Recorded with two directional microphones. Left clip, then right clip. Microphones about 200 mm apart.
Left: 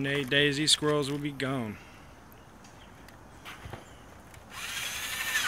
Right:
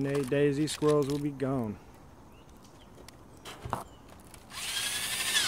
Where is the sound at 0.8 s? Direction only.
10° right (ahead or behind).